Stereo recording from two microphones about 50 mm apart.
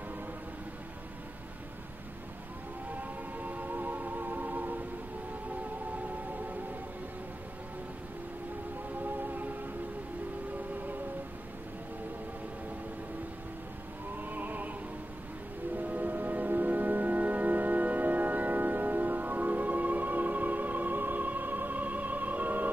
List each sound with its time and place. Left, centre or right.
3.0 s music: right
9.0 s music: right
14.3 s music: right
15.7 s music: right